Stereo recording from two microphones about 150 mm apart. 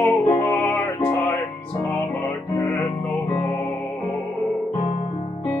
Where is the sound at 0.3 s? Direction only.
15° left (ahead or behind).